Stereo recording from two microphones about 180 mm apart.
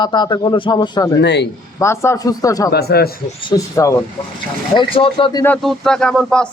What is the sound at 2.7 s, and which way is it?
Speech, 60° left (ahead or behind).